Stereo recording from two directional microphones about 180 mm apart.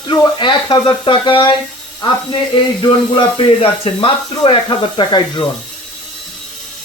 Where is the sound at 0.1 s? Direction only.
25° left (ahead or behind).